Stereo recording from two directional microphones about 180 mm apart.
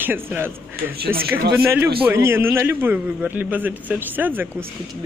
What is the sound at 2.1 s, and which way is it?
Speech, 15° right (ahead or behind).